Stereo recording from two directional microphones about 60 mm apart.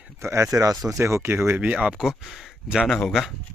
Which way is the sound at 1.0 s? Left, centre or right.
Right.